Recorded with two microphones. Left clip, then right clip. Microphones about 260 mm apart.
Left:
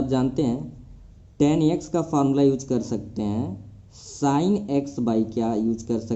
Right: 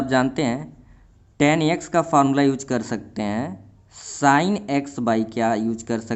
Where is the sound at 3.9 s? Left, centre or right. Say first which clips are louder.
Right 5 dB; right.